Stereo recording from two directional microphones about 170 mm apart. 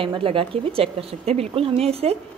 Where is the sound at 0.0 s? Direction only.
30° right (ahead or behind).